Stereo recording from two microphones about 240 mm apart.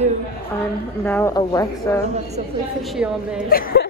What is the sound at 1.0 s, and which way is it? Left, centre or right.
Speech, centre.